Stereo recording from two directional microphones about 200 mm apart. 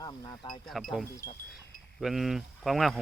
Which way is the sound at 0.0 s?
20° left (ahead or behind).